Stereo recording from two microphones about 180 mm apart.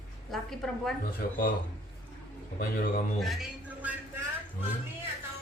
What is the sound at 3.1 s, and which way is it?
Speech, centre (ahead or behind).